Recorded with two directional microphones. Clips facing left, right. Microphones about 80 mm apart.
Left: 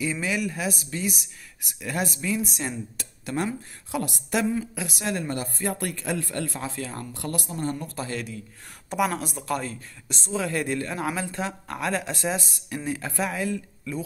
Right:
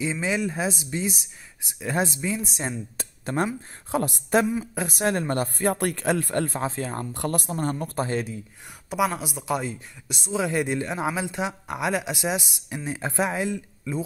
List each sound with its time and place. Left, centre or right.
0.0 s speech: right
3.0 s speech: right
7.2 s speech: right
8.9 s a woman's voice: centre; by 14.0 s right